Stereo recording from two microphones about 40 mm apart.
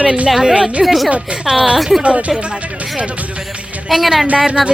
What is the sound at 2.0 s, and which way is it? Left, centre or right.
Speech, right.